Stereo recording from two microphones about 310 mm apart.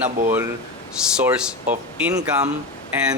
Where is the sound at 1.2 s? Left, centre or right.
Centre.